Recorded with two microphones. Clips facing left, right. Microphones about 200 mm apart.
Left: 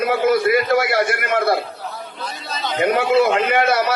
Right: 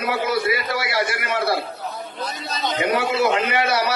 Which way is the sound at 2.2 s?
40° right (ahead or behind).